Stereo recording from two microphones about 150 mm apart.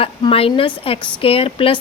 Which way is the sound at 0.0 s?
40° left (ahead or behind).